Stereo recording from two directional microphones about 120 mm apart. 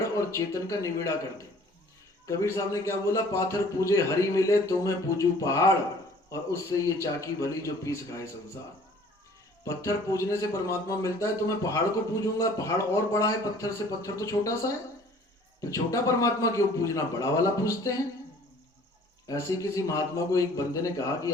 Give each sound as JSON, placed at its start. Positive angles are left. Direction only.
{"t": 0.2, "sound": "speech", "side_deg": 25}
{"t": 9.6, "sound": "speech", "side_deg": 25}
{"t": 19.3, "sound": "speech", "side_deg": 25}